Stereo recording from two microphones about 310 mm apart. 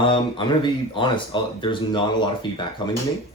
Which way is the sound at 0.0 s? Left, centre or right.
Centre.